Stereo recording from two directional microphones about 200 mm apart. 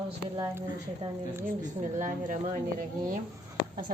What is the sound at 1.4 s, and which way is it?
Speech, 40° right (ahead or behind).